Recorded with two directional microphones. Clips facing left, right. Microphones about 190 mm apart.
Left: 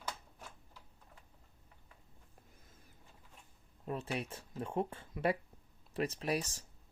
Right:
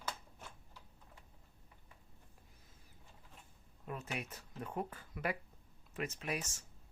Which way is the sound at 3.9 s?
30° left (ahead or behind).